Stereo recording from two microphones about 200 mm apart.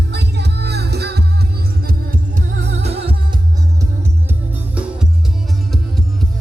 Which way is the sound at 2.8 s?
30° right (ahead or behind).